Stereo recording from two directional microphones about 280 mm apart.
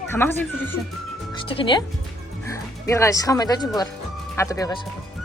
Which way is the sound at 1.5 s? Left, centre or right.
Centre.